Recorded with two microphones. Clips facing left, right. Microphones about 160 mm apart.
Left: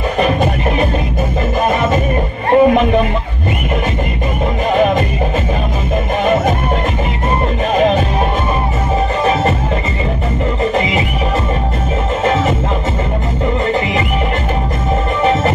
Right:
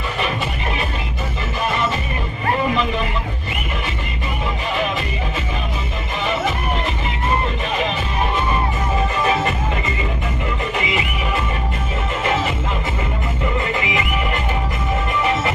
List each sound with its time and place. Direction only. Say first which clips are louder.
0.2 s music: left 10 dB; 45° left (ahead or behind)
4.7 s music: left 11 dB; 45° left (ahead or behind)
6.2 s music: left 7 dB; 50° left (ahead or behind)
7.7 s music: left 12 dB; 45° left (ahead or behind)
10.6 s music: left 8 dB; 40° left (ahead or behind)